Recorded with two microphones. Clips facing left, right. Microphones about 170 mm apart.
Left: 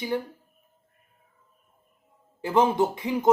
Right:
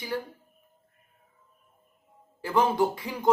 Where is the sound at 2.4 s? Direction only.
20° left (ahead or behind).